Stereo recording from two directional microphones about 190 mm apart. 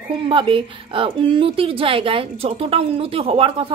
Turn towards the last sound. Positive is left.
turn(degrees=-30)  # may be behind; listen again after turning